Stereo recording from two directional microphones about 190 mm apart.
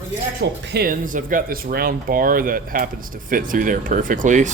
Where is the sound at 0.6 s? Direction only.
55° right (ahead or behind).